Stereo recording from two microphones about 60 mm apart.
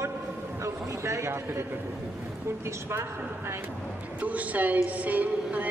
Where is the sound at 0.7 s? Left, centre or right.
Right.